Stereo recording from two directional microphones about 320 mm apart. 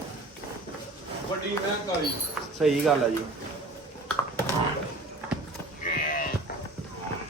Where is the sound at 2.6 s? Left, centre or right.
Centre.